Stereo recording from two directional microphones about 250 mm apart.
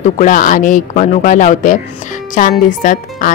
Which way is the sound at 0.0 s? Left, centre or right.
Left.